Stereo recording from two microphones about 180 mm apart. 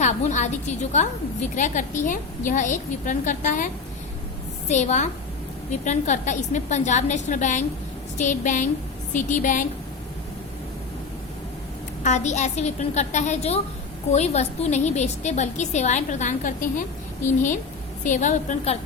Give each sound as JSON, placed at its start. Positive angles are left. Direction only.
{"t": 0.0, "sound": "a sound", "side_deg": 40}
{"t": 0.9, "sound": "a woman's voice", "side_deg": 45}
{"t": 4.7, "sound": "a woman's voice", "side_deg": 40}
{"t": 12.0, "sound": "a woman's voice", "side_deg": 40}
{"t": 18.0, "sound": "a woman's voice", "side_deg": 45}